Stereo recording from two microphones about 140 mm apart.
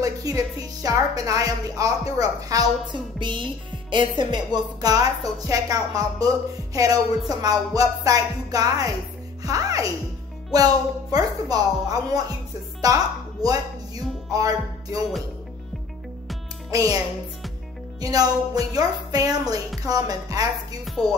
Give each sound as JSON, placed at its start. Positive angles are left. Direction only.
{"t": 0.0, "sound": "music", "side_deg": -25}
{"t": 2.1, "sound": "a woman's voice", "side_deg": -25}
{"t": 5.4, "sound": "music", "side_deg": -25}
{"t": 12.8, "sound": "speech", "side_deg": -25}
{"t": 14.3, "sound": "music", "side_deg": -25}
{"t": 16.7, "sound": "music", "side_deg": -25}
{"t": 18.0, "sound": "music", "side_deg": -25}